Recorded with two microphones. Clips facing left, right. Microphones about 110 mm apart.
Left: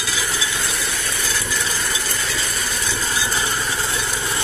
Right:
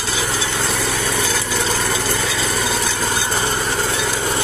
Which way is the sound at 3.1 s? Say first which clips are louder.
Right 3 dB; 50° right (ahead or behind).